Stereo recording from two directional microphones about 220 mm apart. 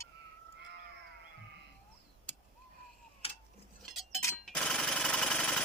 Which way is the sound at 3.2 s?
25° left (ahead or behind).